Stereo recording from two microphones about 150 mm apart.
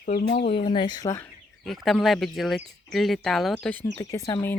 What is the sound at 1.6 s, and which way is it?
Speech, centre (ahead or behind).